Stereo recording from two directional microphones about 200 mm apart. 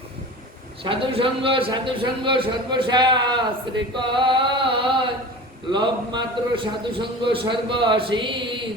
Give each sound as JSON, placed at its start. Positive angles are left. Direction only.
{"t": 0.9, "sound": "a man's voice", "side_deg": -25}